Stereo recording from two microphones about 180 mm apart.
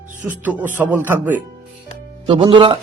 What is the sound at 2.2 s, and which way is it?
Speech, 30° right (ahead or behind).